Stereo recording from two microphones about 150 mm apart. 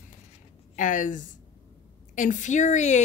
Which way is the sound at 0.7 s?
60° left (ahead or behind).